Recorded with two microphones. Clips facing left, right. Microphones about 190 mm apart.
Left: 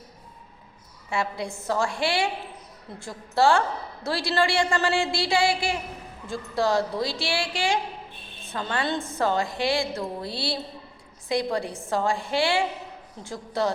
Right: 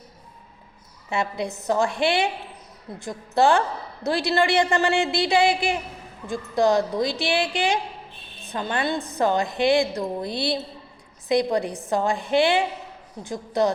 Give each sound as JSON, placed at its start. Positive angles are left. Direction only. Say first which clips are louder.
{"t": 1.1, "sound": "a woman's voice", "louder": "right 2 dB", "side_deg": -20}